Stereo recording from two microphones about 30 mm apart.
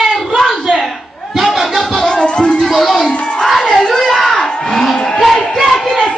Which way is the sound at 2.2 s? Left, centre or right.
Left.